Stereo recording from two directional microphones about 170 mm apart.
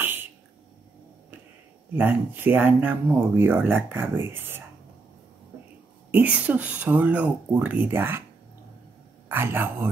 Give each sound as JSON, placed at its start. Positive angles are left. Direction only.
{"t": 0.0, "sound": "a sound", "side_deg": -10}
{"t": 2.0, "sound": "speech", "side_deg": -10}
{"t": 6.1, "sound": "speech", "side_deg": -10}
{"t": 9.3, "sound": "speech", "side_deg": -15}